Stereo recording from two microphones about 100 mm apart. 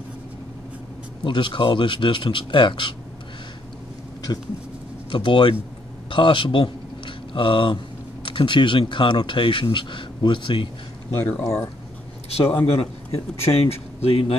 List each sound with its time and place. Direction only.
1.2 s speech: 55° left (ahead or behind)
4.3 s speech: 40° left (ahead or behind)
5.1 s speech: 55° left (ahead or behind)
11.3 s speech: 5° left (ahead or behind)
12.3 s a man's voice: 90° left